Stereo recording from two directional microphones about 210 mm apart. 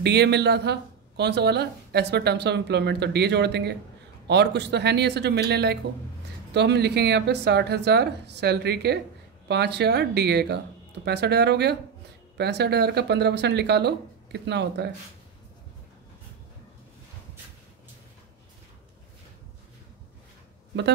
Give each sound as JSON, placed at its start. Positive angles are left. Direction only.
{"t": 0.0, "sound": "speech", "side_deg": -55}